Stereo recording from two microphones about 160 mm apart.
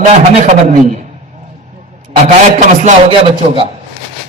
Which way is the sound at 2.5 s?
45° right (ahead or behind).